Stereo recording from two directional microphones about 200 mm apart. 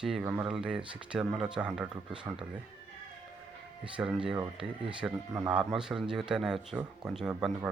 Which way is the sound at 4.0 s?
5° right (ahead or behind).